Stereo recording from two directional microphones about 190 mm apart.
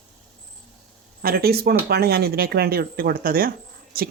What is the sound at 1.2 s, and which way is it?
Speech, 55° right (ahead or behind).